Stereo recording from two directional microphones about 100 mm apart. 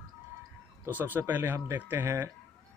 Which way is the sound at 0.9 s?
20° right (ahead or behind).